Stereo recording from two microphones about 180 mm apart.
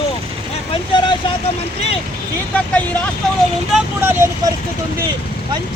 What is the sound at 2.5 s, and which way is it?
Speech, 5° left (ahead or behind).